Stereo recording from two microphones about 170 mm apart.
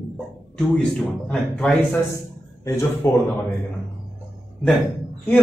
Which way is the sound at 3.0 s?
15° left (ahead or behind).